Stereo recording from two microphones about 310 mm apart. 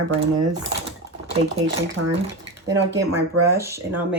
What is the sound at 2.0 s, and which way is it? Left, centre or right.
Speech, right.